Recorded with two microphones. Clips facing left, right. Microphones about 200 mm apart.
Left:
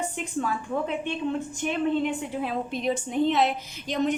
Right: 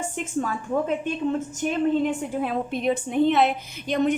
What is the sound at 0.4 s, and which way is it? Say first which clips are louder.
A woman's voice: right 2 dB; 45° right (ahead or behind).